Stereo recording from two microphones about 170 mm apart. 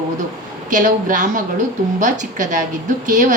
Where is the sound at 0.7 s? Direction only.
50° right (ahead or behind).